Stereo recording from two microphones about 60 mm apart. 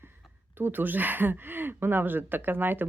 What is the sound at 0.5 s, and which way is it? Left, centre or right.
Speech, right.